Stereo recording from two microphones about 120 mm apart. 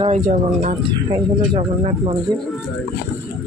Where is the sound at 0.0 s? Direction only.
80° right.